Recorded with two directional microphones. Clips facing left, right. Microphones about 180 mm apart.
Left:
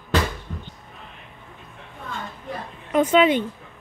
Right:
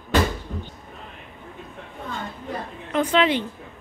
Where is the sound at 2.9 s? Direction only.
20° left (ahead or behind).